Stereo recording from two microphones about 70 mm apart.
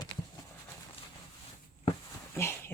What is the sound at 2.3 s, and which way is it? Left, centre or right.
Dog, left.